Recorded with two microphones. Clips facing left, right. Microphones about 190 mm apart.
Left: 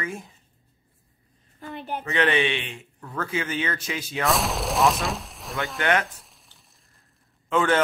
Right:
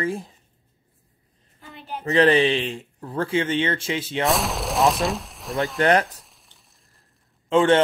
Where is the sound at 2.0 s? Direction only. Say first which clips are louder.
Right 6 dB; 35° right (ahead or behind).